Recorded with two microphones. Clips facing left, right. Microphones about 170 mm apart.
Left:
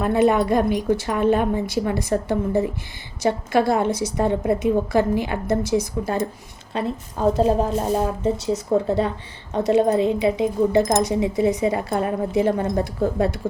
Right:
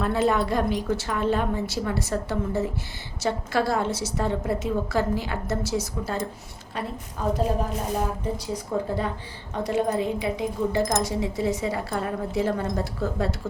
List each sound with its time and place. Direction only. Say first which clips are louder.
0.0 s a woman's voice: left 5 dB; 15° left (ahead or behind)
6.7 s a woman's voice: left 7 dB; 30° left (ahead or behind)
9.5 s a woman's voice: left 7 dB; 20° left (ahead or behind)